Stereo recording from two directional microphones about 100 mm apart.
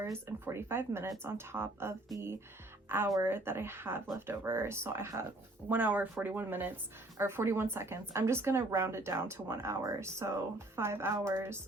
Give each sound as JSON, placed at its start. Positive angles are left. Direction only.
{"t": 0.0, "sound": "speech", "side_deg": -25}
{"t": 3.2, "sound": "speech", "side_deg": -25}